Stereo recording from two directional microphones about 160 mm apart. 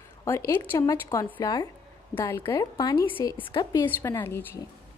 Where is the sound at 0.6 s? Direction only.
15° left (ahead or behind).